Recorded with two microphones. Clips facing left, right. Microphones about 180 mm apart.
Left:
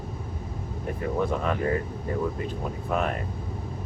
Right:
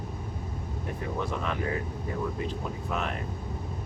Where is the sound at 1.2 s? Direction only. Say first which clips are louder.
Left 6 dB; 50° left (ahead or behind).